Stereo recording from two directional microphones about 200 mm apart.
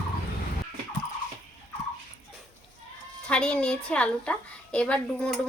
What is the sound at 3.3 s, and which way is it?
A woman's voice, 5° left (ahead or behind).